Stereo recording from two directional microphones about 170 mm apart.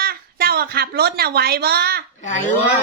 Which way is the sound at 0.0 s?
65° right (ahead or behind).